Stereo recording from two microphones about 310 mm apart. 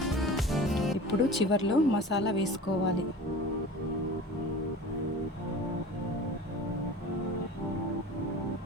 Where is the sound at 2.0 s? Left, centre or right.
Left.